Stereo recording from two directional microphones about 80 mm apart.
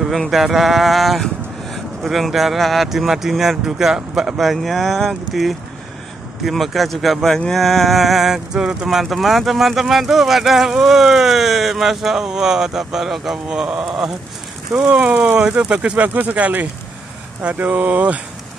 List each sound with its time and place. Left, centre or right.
0.0 s speech: centre
16.0 s speech: right